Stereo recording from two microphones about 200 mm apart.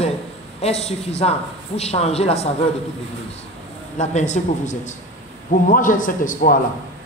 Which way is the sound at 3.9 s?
35° left (ahead or behind).